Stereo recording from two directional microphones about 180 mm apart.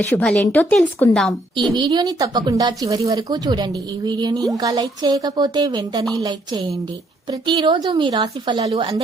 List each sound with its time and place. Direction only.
0.1 s a woman's voice: 10° left (ahead or behind)
1.7 s speech: 25° right (ahead or behind)